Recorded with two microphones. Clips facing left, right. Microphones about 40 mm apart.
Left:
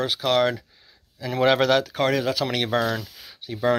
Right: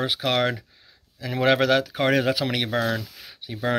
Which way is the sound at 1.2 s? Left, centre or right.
Centre.